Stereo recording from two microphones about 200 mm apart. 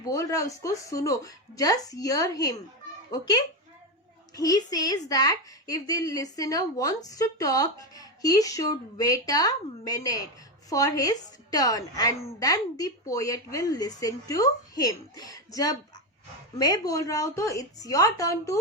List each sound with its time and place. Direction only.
0.0 s a woman's voice: 15° left (ahead or behind)